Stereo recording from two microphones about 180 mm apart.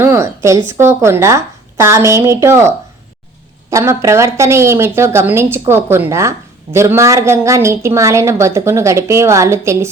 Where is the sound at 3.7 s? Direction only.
15° right (ahead or behind).